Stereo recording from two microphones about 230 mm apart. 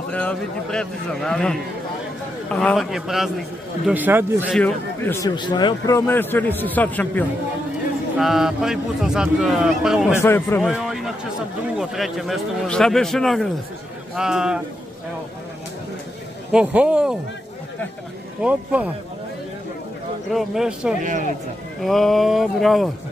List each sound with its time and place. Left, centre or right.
0.1 s speech: centre
4.6 s a man's voice: centre
10.2 s a man's voice: centre
10.6 s speech: centre
16.5 s speech: centre
18.4 s speech: centre
20.3 s speech: centre
21.0 s speech: right
21.8 s speech: centre